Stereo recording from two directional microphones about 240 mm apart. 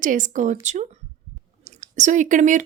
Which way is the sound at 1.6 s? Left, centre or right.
Right.